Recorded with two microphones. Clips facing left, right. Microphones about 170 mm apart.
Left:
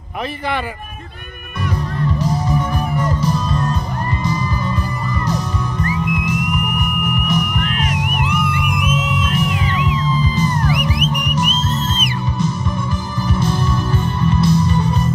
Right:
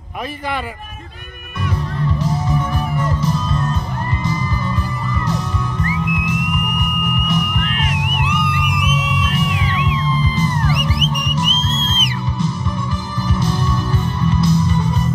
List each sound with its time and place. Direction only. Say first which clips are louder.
2.2 s music: left 1 dB; 40° left (ahead or behind)
5.2 s music: left 1 dB; 40° left (ahead or behind)
13.3 s music: left 1 dB; 50° left (ahead or behind)